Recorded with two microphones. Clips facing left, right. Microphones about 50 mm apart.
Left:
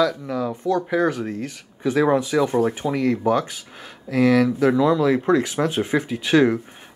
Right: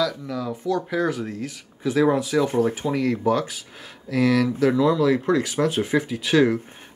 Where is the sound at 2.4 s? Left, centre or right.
Centre.